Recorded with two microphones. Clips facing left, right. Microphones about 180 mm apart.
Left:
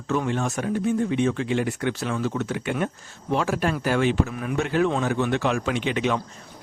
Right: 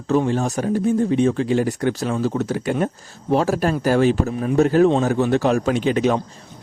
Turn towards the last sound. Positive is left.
turn(degrees=-40)  # may be behind; listen again after turning